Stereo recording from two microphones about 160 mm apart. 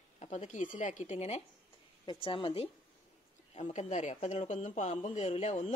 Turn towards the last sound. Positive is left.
turn(degrees=45)  # may be behind; listen again after turning